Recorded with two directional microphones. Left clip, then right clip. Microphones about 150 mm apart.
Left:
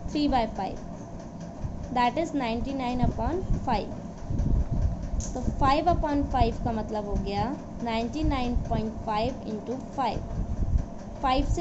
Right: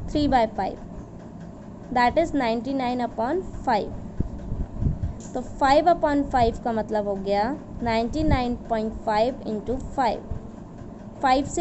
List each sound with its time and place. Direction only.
0.1 s a woman's voice: 40° right (ahead or behind)
2.0 s a woman's voice: 40° right (ahead or behind)
5.3 s a woman's voice: 45° right (ahead or behind)
11.2 s a woman's voice: 45° right (ahead or behind)